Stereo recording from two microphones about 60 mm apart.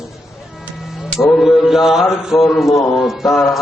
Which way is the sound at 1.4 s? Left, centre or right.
Centre.